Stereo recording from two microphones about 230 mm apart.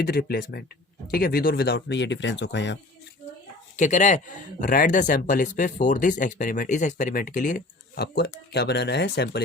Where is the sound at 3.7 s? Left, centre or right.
Left.